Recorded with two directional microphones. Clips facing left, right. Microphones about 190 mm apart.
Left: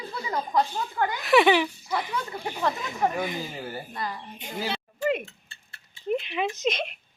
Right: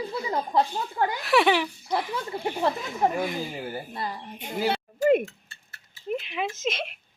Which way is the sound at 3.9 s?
30° right (ahead or behind).